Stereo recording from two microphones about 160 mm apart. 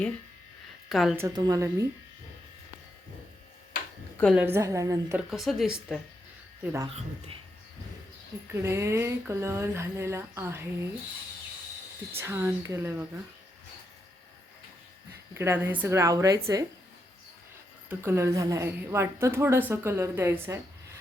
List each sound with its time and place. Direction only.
0.9 s a woman's voice: centre (ahead or behind)
1.3 s speech: 25° right (ahead or behind)
4.4 s a woman's voice: 15° right (ahead or behind)
5.1 s speech: centre (ahead or behind)
6.8 s speech: 35° right (ahead or behind)
8.5 s a woman's voice: 15° right (ahead or behind)
12.1 s a woman's voice: 15° right (ahead or behind)
15.4 s a woman's voice: 15° right (ahead or behind)
17.8 s a woman's voice: 15° right (ahead or behind)